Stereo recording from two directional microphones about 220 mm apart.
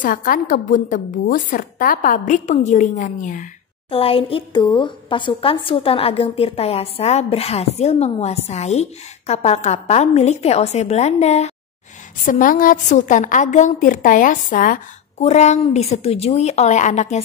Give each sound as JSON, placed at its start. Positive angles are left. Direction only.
{"t": 0.0, "sound": "a woman's voice", "side_deg": 40}
{"t": 3.9, "sound": "a woman's voice", "side_deg": 25}